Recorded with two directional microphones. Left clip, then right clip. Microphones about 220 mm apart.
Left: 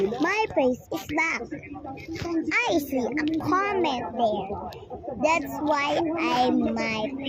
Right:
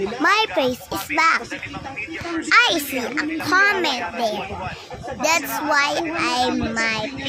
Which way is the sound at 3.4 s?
45° right (ahead or behind).